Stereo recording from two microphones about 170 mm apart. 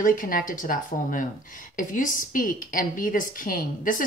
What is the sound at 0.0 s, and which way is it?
Speech, 50° left (ahead or behind).